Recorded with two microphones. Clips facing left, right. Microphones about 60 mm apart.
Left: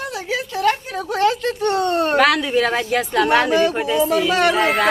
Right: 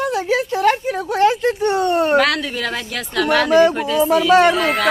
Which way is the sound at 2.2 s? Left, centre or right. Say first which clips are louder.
Left 3 dB; centre.